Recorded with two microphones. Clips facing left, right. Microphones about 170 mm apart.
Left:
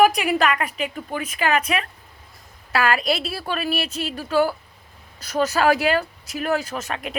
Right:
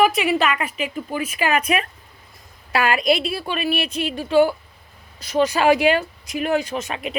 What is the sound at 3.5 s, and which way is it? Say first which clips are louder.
Speech: even; 40° left (ahead or behind).